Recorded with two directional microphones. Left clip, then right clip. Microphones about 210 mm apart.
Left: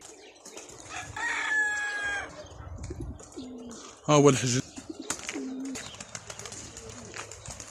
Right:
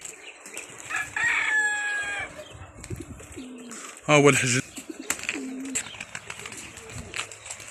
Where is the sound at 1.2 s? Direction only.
45° right (ahead or behind).